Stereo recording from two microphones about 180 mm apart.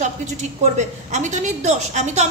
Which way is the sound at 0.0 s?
40° right (ahead or behind).